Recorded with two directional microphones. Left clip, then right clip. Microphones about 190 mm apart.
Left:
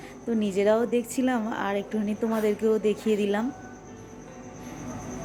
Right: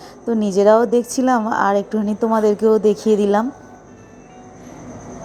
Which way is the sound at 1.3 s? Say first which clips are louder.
Right 12 dB; 5° right (ahead or behind).